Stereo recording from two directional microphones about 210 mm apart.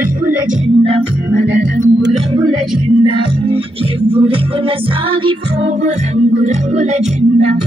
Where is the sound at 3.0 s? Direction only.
25° right (ahead or behind).